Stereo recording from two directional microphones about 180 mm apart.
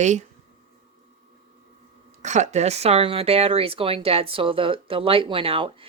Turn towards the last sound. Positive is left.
turn(degrees=-30)  # may be behind; listen again after turning